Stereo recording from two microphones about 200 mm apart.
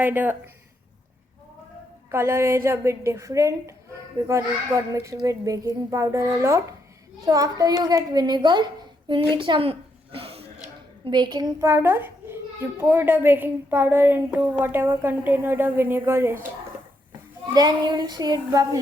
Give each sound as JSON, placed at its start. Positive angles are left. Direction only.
{"t": 0.0, "sound": "a child's voice", "side_deg": -10}
{"t": 2.1, "sound": "a child's voice", "side_deg": -10}
{"t": 17.5, "sound": "a child's voice", "side_deg": -20}